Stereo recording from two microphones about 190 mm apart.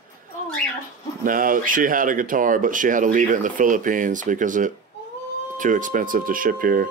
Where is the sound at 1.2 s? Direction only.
45° right (ahead or behind).